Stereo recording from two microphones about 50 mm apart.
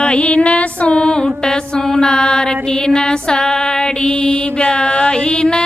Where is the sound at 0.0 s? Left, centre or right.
Left.